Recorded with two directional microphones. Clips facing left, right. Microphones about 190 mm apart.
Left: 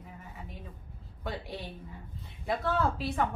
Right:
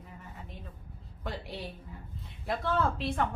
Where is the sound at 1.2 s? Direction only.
Centre (ahead or behind).